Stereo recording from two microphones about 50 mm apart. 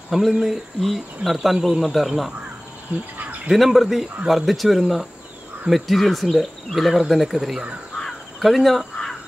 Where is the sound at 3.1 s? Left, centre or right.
Right.